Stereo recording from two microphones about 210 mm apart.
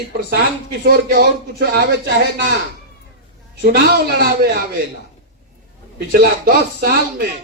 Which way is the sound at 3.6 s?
45° right (ahead or behind).